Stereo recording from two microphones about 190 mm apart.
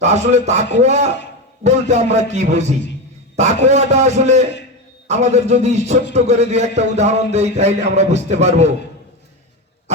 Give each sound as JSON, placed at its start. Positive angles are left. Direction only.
{"t": 0.0, "sound": "a man's voice", "side_deg": -35}